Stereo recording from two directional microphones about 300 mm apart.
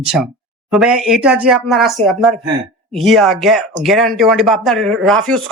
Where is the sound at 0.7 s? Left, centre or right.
Centre.